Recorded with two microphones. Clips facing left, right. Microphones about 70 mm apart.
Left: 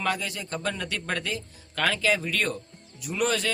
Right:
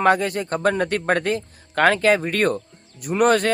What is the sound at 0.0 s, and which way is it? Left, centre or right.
Speech, right.